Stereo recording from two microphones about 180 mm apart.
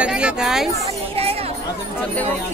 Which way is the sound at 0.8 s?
35° right (ahead or behind).